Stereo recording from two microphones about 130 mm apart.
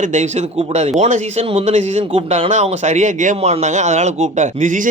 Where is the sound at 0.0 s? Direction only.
65° right (ahead or behind).